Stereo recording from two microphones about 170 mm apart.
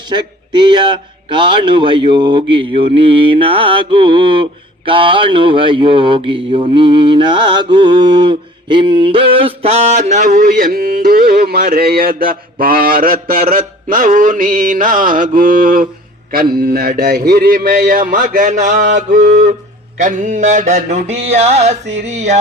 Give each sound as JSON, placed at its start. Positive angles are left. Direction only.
{"t": 0.1, "sound": "speech", "side_deg": -25}
{"t": 10.9, "sound": "music", "side_deg": -60}
{"t": 16.3, "sound": "mantra", "side_deg": -60}